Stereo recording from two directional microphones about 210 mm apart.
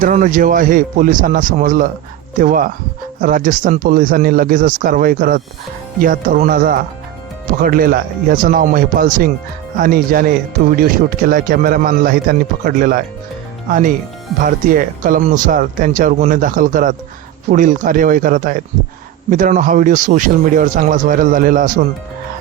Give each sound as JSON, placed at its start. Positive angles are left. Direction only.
{"t": 0.0, "sound": "a man's voice", "side_deg": -40}
{"t": 14.4, "sound": "speech", "side_deg": -40}